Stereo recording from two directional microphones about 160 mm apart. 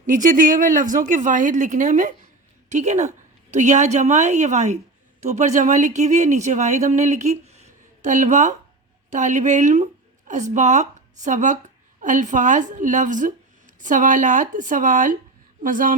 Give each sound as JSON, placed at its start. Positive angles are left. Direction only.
{"t": 0.0, "sound": "a woman's voice", "side_deg": -55}